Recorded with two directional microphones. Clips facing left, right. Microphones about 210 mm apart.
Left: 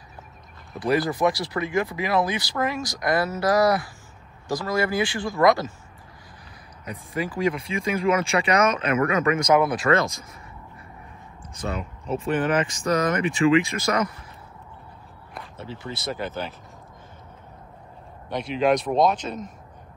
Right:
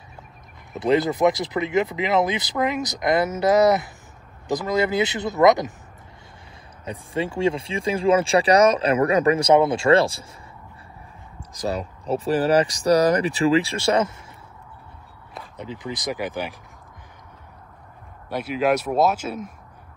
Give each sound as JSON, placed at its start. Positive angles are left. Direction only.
{"t": 0.7, "sound": "speech", "side_deg": -20}
{"t": 6.8, "sound": "speech", "side_deg": -30}
{"t": 11.5, "sound": "speech", "side_deg": -35}
{"t": 15.5, "sound": "speech", "side_deg": -15}
{"t": 18.3, "sound": "speech", "side_deg": -5}